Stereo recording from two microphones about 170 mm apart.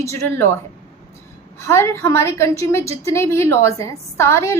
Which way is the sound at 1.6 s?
15° left (ahead or behind).